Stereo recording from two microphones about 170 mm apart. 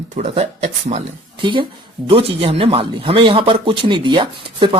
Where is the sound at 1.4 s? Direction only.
30° right (ahead or behind).